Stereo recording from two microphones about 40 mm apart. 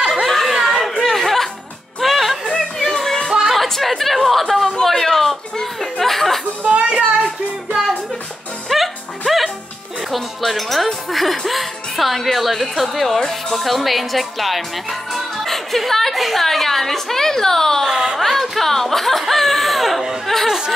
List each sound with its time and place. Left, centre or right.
0.0 s chatter: centre
0.7 s music: centre
2.4 s music: centre
3.5 s chatter: centre
4.8 s a sound: centre
6.6 s a sound: right
7.2 s child singing: centre
8.6 s music: centre
10.1 s a woman's voice: centre